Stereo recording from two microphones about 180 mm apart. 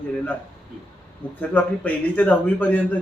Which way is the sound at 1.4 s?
10° left (ahead or behind).